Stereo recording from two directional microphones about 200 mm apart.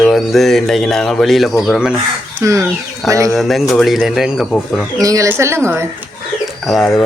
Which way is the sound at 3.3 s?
Centre (ahead or behind).